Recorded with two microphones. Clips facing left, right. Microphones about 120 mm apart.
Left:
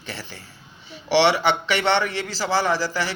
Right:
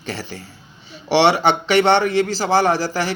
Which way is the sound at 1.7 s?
55° right (ahead or behind).